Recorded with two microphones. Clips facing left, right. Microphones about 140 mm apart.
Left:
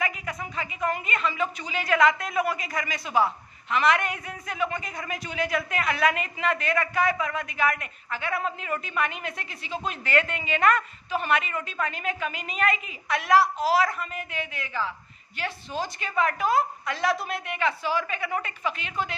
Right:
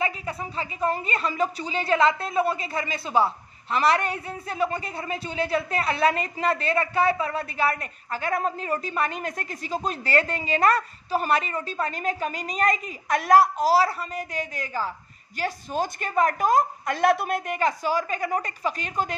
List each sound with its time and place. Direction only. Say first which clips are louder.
0.0 s a woman's voice: right 2 dB; 30° right (ahead or behind)